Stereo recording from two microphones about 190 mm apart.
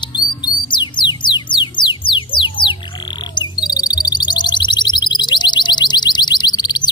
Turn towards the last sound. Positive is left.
turn(degrees=20)  # may be behind; listen again after turning